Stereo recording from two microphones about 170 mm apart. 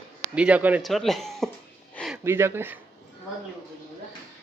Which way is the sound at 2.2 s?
15° right (ahead or behind).